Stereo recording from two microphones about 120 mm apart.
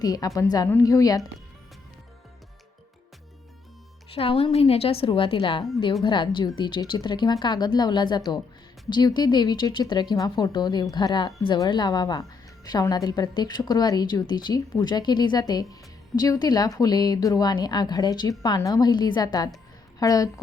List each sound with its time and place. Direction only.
0.0 s speech: 30° left (ahead or behind)
4.1 s a woman's voice: 55° left (ahead or behind); by 20.3 s 30° left (ahead or behind)